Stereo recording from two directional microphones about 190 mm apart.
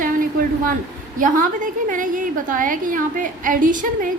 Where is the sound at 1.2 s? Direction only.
45° right (ahead or behind).